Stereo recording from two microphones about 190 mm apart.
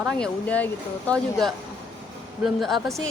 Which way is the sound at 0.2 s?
10° left (ahead or behind).